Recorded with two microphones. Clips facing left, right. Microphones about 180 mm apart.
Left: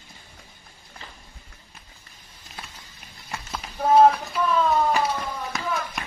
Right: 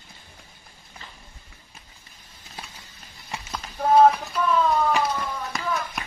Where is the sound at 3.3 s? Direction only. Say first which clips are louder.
Even; centre (ahead or behind).